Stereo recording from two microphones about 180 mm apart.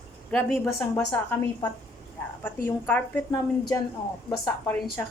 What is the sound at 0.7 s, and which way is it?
A woman's voice, 15° left (ahead or behind).